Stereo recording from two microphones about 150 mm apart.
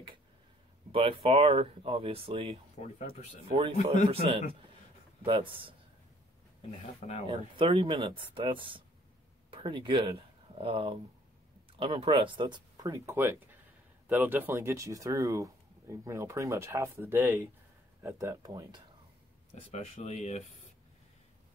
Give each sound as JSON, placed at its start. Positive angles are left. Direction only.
{"t": 0.9, "sound": "speech", "side_deg": -40}
{"t": 7.2, "sound": "speech", "side_deg": -35}
{"t": 19.5, "sound": "speech", "side_deg": 45}